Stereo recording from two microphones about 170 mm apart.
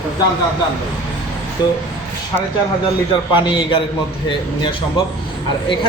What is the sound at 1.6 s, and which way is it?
Speech, 25° left (ahead or behind).